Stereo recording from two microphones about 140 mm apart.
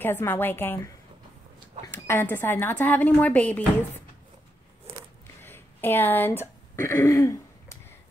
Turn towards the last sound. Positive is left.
turn(degrees=20)  # may be behind; listen again after turning